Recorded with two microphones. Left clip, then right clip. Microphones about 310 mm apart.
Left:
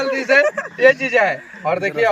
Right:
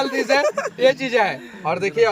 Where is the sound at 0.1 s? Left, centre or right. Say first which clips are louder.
Left 4 dB; centre.